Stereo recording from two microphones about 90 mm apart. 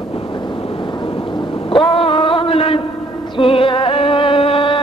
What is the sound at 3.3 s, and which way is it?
Music, 85° left.